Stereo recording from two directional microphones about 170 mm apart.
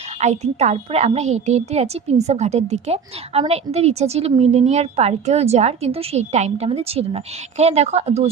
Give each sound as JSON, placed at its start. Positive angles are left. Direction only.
{"t": 0.2, "sound": "a woman's voice", "side_deg": -40}